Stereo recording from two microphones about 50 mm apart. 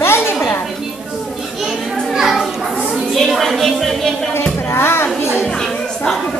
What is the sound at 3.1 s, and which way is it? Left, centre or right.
Music, centre.